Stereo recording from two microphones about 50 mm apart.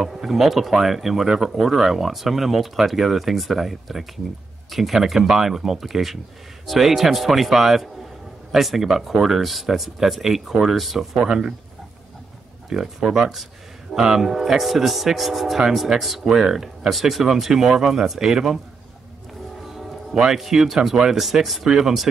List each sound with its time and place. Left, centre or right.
0.0 s speech: centre
11.2 s speech: centre
12.6 s speech: centre
19.7 s speech: centre